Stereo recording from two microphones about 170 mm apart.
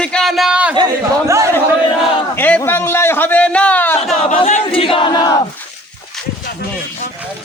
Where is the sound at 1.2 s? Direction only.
15° right (ahead or behind).